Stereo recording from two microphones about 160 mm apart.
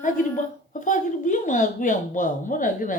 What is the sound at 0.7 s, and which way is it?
Speech, 55° left (ahead or behind).